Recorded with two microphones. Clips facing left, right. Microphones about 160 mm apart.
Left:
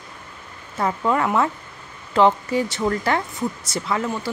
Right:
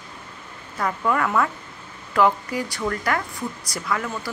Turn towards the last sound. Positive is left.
turn(degrees=25)  # may be behind; listen again after turning